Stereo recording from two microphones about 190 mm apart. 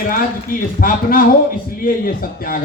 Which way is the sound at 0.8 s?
50° left (ahead or behind).